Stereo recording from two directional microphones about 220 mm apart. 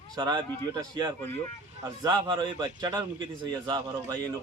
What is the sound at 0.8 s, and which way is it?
A man's voice, 15° right (ahead or behind).